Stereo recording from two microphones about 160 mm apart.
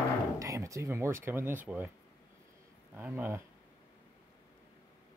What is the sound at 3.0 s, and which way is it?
Speech, 10° right (ahead or behind).